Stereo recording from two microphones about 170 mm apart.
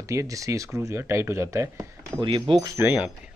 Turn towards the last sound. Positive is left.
turn(degrees=-10)  # may be behind; listen again after turning